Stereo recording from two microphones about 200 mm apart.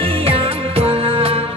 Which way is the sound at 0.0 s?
30° right (ahead or behind).